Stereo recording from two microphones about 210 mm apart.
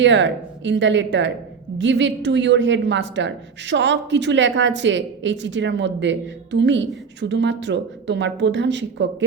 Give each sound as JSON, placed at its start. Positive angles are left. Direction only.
{"t": 0.0, "sound": "speech", "side_deg": -60}